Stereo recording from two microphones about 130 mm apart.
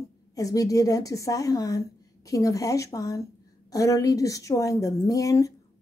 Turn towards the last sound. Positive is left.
turn(degrees=25)  # may be behind; listen again after turning